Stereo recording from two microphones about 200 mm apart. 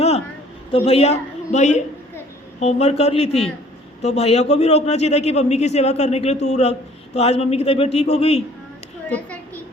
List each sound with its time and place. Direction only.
0.9 s a man's voice: 30° left (ahead or behind)
9.0 s a woman's voice: 5° left (ahead or behind)